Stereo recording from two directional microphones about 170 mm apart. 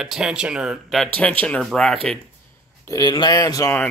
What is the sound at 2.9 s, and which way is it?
Speech, 20° left (ahead or behind).